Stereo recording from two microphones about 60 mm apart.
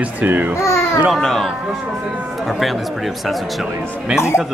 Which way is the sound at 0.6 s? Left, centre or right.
Left.